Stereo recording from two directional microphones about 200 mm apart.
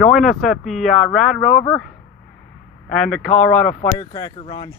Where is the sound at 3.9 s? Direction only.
20° left (ahead or behind).